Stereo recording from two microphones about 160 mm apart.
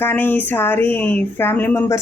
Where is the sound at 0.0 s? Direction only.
10° left (ahead or behind).